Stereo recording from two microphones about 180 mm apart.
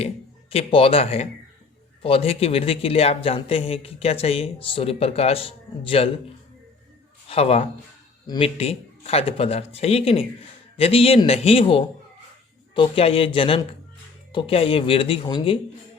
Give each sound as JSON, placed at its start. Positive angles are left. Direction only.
{"t": 0.5, "sound": "speech", "side_deg": 30}
{"t": 7.3, "sound": "speech", "side_deg": 35}